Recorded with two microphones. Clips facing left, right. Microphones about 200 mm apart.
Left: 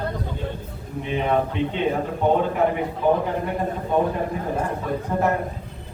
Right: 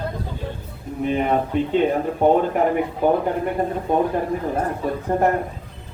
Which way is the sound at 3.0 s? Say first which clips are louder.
Right 1 dB; 45° right (ahead or behind).